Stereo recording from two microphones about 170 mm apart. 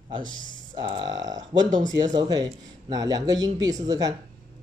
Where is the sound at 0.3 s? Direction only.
25° left (ahead or behind).